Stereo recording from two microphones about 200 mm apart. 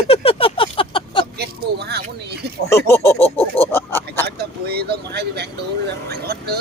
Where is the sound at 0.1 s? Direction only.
30° left (ahead or behind).